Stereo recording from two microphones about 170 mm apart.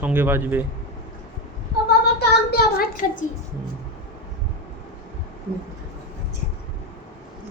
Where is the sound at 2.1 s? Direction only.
65° left (ahead or behind).